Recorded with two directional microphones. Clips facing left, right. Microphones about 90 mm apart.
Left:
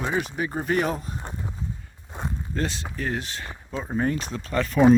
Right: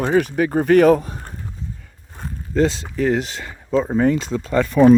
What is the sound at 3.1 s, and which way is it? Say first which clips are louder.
Speech: right 8 dB; 90° right.